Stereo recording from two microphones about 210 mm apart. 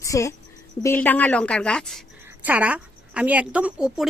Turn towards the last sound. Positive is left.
turn(degrees=-5)  # may be behind; listen again after turning